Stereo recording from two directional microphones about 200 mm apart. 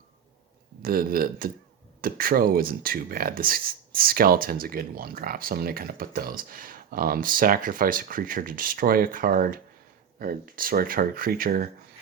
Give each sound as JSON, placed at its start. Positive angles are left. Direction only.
{"t": 0.8, "sound": "speech", "side_deg": -45}